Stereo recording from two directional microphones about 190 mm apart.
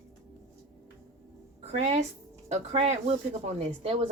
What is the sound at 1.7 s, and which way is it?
Speech, 35° right (ahead or behind).